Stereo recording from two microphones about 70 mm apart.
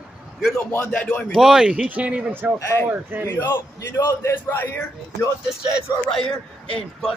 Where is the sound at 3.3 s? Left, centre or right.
Left.